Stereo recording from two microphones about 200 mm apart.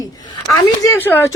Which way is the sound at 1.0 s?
10° left (ahead or behind).